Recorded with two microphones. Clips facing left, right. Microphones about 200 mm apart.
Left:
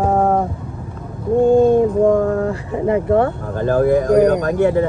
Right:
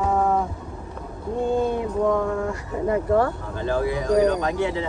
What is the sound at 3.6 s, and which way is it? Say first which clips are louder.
Speech: left 10 dB; 55° left (ahead or behind).